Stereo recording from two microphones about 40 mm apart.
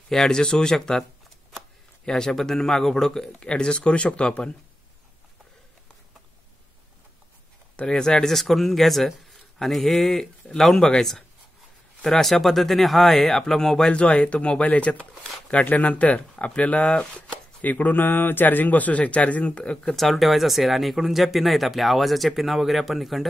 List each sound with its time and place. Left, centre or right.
0.1 s a man's voice: centre
2.0 s a man's voice: centre; by 4.4 s left
7.9 s a man's voice: centre
12.0 s a man's voice: centre
13.9 s speech: left
16.8 s speech: left
17.6 s a man's voice: left
19.9 s speech: centre